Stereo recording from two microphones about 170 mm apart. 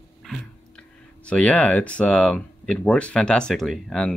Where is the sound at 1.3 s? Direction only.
10° left (ahead or behind).